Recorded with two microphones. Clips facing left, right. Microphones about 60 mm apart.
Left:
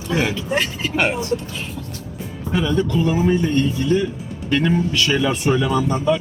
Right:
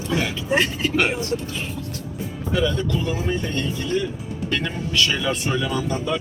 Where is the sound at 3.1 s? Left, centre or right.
Left.